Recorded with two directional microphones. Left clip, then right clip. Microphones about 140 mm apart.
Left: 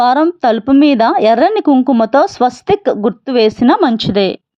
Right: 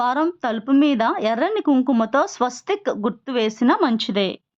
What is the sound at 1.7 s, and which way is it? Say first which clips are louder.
Speech: left 8 dB; 20° left (ahead or behind).